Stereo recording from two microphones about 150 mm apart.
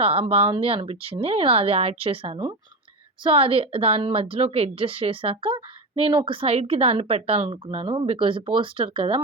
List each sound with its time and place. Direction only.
0.0 s a woman's voice: 40° right (ahead or behind)